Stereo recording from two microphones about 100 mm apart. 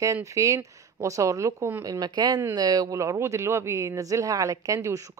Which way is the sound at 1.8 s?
40° right (ahead or behind).